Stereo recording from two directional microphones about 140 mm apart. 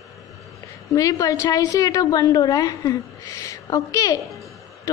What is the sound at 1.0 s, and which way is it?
A woman's voice, 25° left (ahead or behind).